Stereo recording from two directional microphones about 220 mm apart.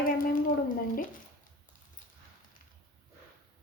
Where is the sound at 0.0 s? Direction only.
40° left (ahead or behind).